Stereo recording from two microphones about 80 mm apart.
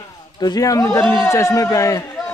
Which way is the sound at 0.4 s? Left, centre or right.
Left.